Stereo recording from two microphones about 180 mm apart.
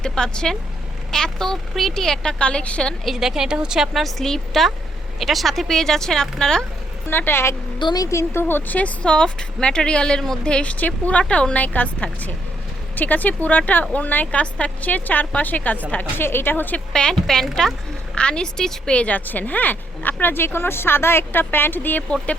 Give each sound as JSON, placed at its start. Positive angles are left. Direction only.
{"t": 0.0, "sound": "a woman's voice", "side_deg": 5}